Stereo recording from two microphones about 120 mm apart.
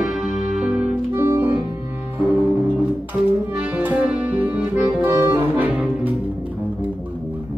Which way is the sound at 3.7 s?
10° right (ahead or behind).